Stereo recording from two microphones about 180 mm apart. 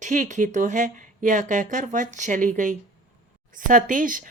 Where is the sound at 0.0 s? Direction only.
45° right (ahead or behind).